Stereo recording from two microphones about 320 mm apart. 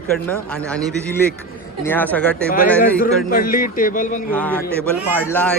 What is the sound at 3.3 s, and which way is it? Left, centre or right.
Speech, left.